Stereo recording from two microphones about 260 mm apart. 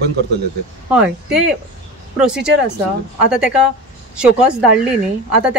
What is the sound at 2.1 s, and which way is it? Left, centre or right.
Speech, centre.